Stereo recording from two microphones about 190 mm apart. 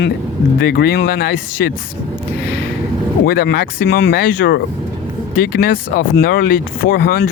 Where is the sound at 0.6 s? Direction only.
60° left (ahead or behind).